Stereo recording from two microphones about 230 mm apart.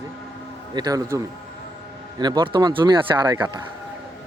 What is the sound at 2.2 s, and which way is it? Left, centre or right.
Speech, centre.